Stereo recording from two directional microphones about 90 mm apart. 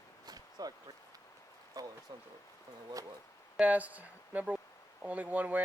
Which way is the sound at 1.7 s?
40° right (ahead or behind).